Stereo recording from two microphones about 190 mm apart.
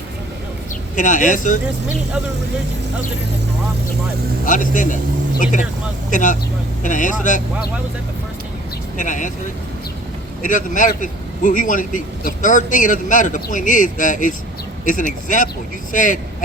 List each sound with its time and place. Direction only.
0.9 s a man's voice: 45° left (ahead or behind)
4.4 s a man's voice: 45° left (ahead or behind)
9.0 s speech: 40° left (ahead or behind)
10.4 s a man's voice: 40° left (ahead or behind)